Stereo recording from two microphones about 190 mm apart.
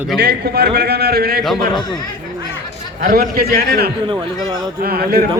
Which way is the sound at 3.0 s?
55° right (ahead or behind).